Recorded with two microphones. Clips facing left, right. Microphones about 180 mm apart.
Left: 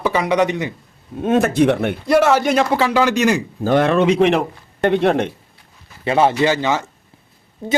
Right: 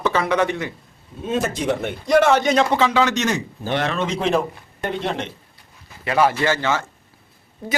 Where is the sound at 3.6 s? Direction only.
45° left (ahead or behind).